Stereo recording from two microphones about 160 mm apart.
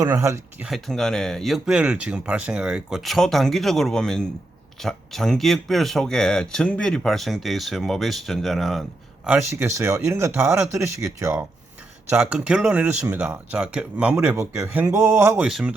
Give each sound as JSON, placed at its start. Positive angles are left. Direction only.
{"t": 0.0, "sound": "speech", "side_deg": -20}
{"t": 0.6, "sound": "speech", "side_deg": 0}
{"t": 9.6, "sound": "speech", "side_deg": -20}
{"t": 12.1, "sound": "speech", "side_deg": -5}
{"t": 15.4, "sound": "speech", "side_deg": 0}